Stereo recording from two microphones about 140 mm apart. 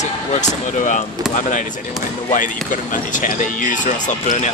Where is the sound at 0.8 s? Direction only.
65° left (ahead or behind).